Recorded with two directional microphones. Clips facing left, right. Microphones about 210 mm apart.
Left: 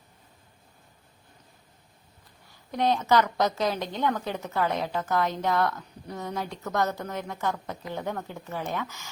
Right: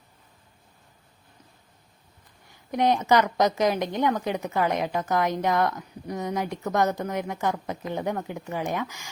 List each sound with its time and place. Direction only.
2.5 s a woman's voice: 15° right (ahead or behind)